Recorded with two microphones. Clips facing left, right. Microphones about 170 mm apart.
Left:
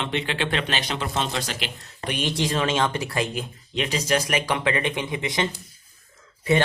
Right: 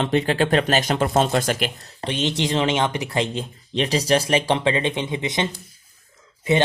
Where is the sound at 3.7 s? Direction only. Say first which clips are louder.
Right 4 dB; 35° right (ahead or behind).